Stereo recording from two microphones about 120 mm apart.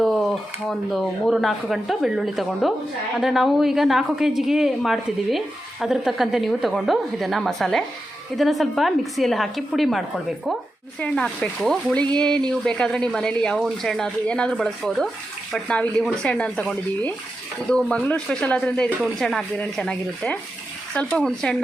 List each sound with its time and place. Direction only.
0.0 s speech: centre (ahead or behind)
11.0 s speech: 10° left (ahead or behind)